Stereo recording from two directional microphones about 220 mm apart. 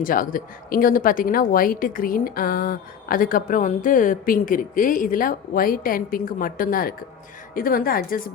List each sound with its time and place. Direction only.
0.0 s a woman's voice: 40° left (ahead or behind)